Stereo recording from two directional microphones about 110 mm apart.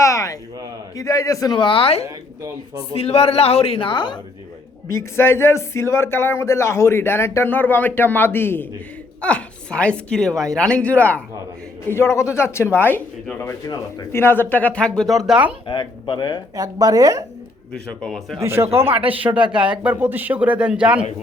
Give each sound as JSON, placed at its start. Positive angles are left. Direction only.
{"t": 0.0, "sound": "a sound", "side_deg": 30}
{"t": 0.9, "sound": "a man's voice", "side_deg": 30}
{"t": 1.5, "sound": "speech", "side_deg": 50}
{"t": 2.0, "sound": "speech", "side_deg": -30}
{"t": 2.9, "sound": "speech", "side_deg": 65}
{"t": 4.9, "sound": "speech", "side_deg": 25}
{"t": 11.9, "sound": "speech", "side_deg": 25}
{"t": 15.6, "sound": "speech", "side_deg": 45}
{"t": 16.6, "sound": "speech", "side_deg": -35}
{"t": 18.0, "sound": "speech", "side_deg": 5}
{"t": 18.3, "sound": "speech", "side_deg": -25}
{"t": 19.3, "sound": "speech", "side_deg": -10}